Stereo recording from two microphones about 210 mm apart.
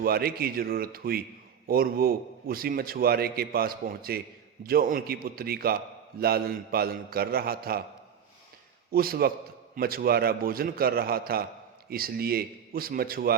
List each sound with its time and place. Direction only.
0.0 s a man's voice: 45° right (ahead or behind)
8.9 s a man's voice: 45° right (ahead or behind)